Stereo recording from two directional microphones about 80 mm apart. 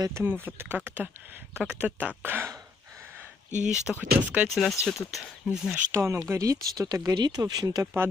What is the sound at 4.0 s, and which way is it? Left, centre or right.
Speech, centre.